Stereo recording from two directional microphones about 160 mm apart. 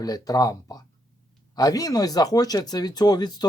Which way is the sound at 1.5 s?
20° left (ahead or behind).